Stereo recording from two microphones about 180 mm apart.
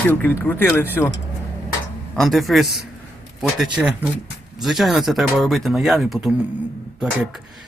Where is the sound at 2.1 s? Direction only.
Centre (ahead or behind).